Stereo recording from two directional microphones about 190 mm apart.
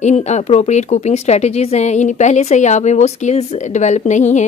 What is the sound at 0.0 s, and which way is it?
A woman's voice, 35° left (ahead or behind).